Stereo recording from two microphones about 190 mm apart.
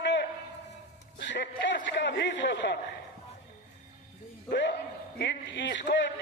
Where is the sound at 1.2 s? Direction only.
70° left (ahead or behind).